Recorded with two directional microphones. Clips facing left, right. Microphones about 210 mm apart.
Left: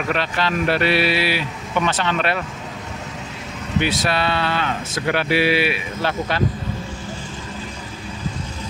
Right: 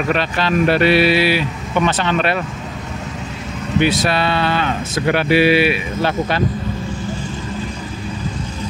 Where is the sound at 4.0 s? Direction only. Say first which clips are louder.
Right 3 dB; 20° right (ahead or behind).